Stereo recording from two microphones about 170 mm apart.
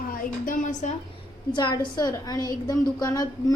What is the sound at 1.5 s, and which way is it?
A woman's voice, 25° left (ahead or behind).